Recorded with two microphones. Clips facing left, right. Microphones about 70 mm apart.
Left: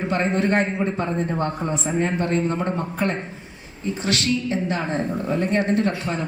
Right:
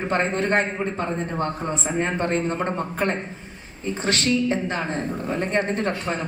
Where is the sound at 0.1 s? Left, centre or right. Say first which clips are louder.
Left 1 dB; right.